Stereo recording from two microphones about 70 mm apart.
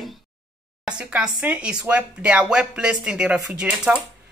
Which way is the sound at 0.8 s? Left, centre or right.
Centre.